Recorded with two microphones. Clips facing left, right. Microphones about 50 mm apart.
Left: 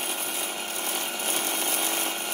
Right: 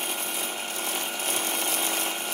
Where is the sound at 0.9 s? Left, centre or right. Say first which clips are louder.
Even; centre.